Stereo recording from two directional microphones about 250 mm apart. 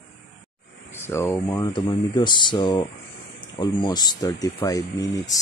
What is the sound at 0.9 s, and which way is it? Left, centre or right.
Speech, centre.